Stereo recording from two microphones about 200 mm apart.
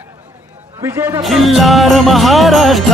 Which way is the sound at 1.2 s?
Centre (ahead or behind).